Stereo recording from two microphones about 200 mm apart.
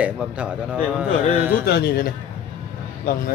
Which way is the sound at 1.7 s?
50° left (ahead or behind).